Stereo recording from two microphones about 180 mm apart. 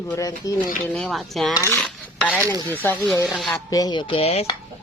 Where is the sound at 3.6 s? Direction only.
20° left (ahead or behind).